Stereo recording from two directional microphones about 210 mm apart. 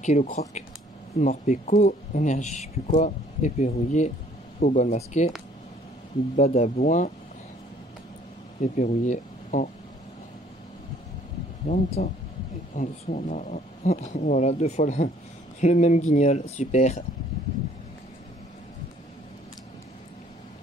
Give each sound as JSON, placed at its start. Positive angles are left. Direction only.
{"t": 0.0, "sound": "speech", "side_deg": 35}
{"t": 6.3, "sound": "speech", "side_deg": 35}
{"t": 8.7, "sound": "speech", "side_deg": 35}
{"t": 11.6, "sound": "speech", "side_deg": 40}